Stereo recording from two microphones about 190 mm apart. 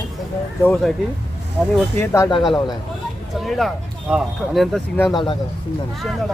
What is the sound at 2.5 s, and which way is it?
Speech, 25° left (ahead or behind).